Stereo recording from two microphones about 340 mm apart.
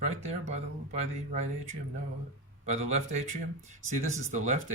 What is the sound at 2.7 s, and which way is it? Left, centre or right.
Speech, centre.